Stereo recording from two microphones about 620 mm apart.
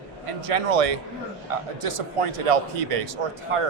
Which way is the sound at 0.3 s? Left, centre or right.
Right.